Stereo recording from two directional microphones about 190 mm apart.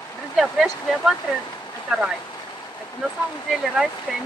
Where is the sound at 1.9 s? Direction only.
Centre (ahead or behind).